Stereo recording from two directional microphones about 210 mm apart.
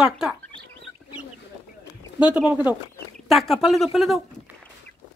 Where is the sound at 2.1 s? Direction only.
5° right (ahead or behind).